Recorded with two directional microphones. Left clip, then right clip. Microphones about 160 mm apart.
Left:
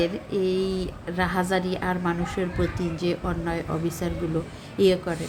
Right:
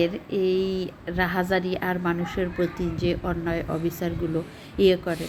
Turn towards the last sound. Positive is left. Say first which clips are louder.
# right 1 dB
turn(degrees=-15)  # may be behind; listen again after turning